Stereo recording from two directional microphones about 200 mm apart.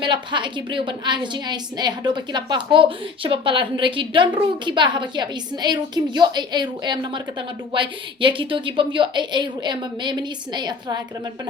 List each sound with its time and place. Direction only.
0.0 s a woman's voice: 25° right (ahead or behind)